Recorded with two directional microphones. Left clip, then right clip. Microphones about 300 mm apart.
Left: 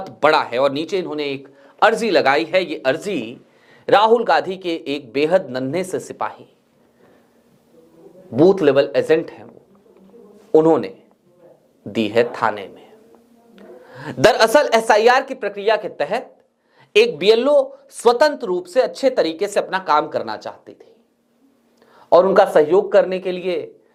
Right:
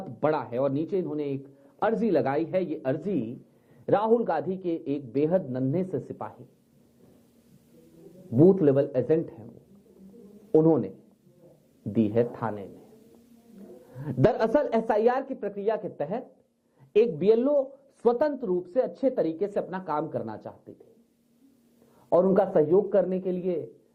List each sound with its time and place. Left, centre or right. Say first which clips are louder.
0.2 s a man's voice: left 11 dB; centre
8.4 s a man's voice: left 8 dB; centre
17.5 s speech: left 10 dB; left
18.0 s a man's voice: left 10 dB; centre
21.9 s a man's voice: left 10 dB; centre